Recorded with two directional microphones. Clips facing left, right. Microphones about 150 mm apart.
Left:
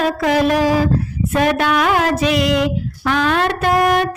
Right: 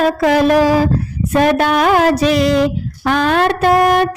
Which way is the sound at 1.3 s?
40° right (ahead or behind).